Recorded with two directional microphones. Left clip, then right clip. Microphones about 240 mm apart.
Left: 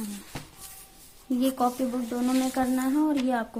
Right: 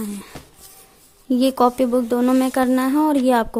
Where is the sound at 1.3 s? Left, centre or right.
Right.